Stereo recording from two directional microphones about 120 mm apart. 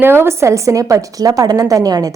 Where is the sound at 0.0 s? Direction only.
20° right (ahead or behind).